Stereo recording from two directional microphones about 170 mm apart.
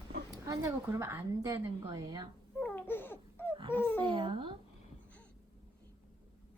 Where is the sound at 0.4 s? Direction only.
20° right (ahead or behind).